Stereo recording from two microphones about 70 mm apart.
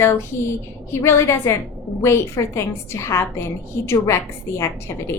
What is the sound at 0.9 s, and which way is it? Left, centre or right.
A woman's voice, left.